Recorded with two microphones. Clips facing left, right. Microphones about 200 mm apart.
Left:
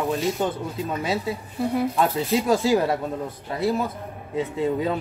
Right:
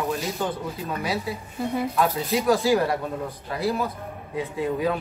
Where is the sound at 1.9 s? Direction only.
30° left (ahead or behind).